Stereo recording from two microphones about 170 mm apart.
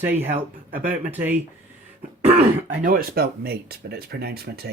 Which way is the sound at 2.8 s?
60° right (ahead or behind).